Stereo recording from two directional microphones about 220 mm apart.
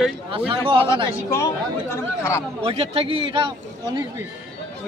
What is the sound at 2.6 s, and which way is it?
Speech, 25° right (ahead or behind).